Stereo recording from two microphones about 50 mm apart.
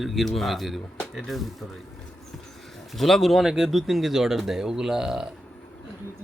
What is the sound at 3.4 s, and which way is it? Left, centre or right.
Speech, centre.